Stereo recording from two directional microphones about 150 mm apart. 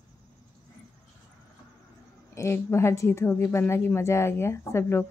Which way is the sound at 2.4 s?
20° left (ahead or behind).